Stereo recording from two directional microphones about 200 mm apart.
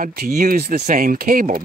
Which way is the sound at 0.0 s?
45° right (ahead or behind).